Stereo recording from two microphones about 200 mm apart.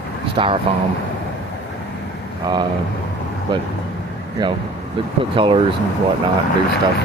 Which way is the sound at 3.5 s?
25° right (ahead or behind).